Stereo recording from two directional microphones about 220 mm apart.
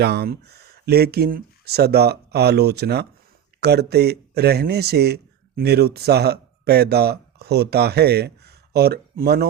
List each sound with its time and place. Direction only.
0.0 s speech: 45° right (ahead or behind)